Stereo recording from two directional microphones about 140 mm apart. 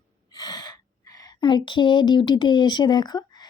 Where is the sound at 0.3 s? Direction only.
30° left (ahead or behind).